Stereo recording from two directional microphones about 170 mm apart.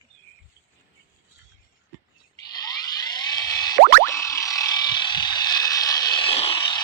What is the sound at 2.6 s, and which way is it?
Boing, 25° left (ahead or behind).